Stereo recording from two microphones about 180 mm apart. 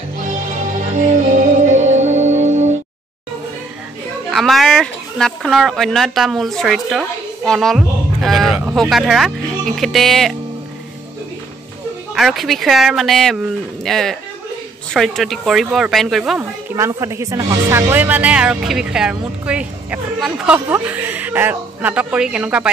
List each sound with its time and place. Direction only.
0.3 s music: 45° right (ahead or behind)
4.3 s speech: centre (ahead or behind)
12.1 s speech: centre (ahead or behind)
16.7 s speech: 15° right (ahead or behind)